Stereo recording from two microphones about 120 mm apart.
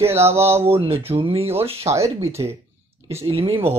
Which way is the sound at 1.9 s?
25° right (ahead or behind).